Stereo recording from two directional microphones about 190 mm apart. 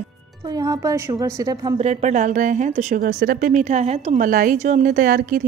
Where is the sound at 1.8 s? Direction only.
35° right (ahead or behind).